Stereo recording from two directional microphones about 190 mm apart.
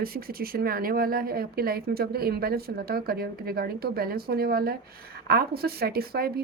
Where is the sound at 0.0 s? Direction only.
50° right (ahead or behind).